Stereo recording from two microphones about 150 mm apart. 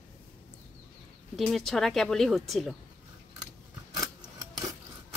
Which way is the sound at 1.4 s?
Centre (ahead or behind).